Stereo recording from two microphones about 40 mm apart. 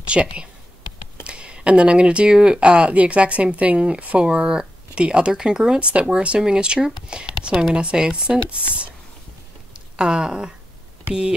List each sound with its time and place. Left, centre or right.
0.1 s speech: right
5.4 s speech: centre
5.8 s speech: right
9.9 s speech: right